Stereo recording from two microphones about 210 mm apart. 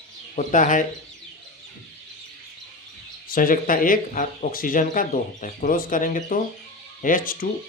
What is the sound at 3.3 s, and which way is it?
Speech, 40° left (ahead or behind).